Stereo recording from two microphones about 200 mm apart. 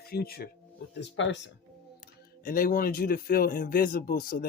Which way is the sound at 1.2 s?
65° left (ahead or behind).